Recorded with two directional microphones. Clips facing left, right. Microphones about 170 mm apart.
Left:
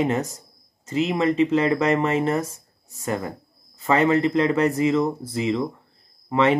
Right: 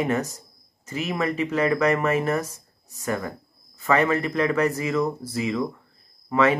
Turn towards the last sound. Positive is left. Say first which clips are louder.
# left 1 dB
turn(degrees=25)  # may be behind; listen again after turning